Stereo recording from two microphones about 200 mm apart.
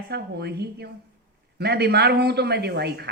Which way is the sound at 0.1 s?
55° right (ahead or behind).